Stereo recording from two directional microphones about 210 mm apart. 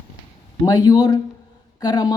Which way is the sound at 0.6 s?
20° left (ahead or behind).